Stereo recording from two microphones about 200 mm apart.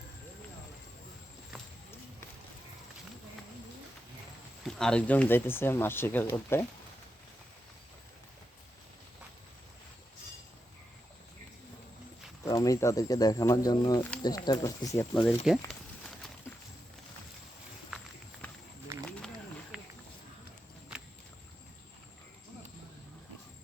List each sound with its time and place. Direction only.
4.6 s speech: 5° left (ahead or behind)
12.5 s speech: 15° left (ahead or behind)
18.4 s walk: 5° left (ahead or behind)
19.7 s a sound: 5° right (ahead or behind)